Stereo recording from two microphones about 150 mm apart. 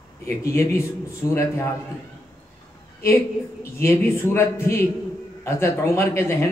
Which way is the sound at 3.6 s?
15° left (ahead or behind).